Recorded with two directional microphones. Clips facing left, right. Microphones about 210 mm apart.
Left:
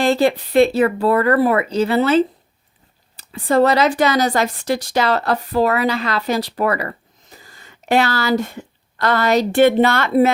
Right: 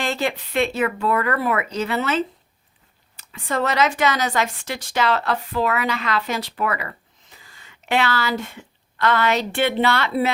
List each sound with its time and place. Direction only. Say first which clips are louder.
0.0 s speech: left 9 dB; 35° left (ahead or behind)